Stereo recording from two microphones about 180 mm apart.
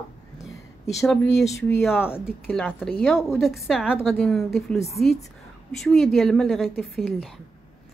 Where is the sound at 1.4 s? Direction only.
15° left (ahead or behind).